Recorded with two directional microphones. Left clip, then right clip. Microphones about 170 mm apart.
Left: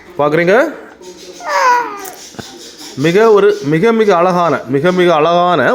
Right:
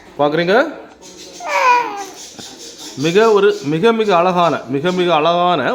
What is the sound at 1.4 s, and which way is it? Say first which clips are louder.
Babbling: left 2 dB; centre (ahead or behind).